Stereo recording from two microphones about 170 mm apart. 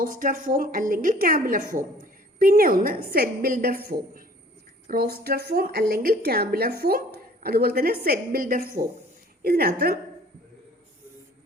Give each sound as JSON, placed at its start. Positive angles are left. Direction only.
{"t": 0.0, "sound": "a woman's voice", "side_deg": -55}